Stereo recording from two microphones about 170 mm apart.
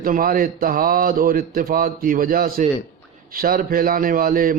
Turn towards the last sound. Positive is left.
turn(degrees=-55)  # may be behind; listen again after turning